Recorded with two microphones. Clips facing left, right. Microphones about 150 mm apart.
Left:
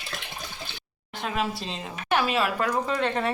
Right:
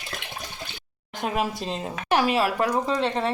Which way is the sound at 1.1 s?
45° right (ahead or behind).